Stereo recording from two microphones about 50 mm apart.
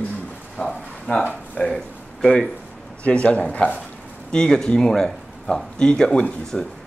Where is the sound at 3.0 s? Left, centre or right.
Left.